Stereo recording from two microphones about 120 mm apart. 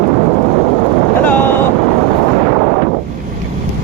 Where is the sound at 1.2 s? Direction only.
15° left (ahead or behind).